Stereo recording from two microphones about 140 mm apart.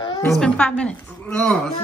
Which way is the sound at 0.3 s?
5° left (ahead or behind).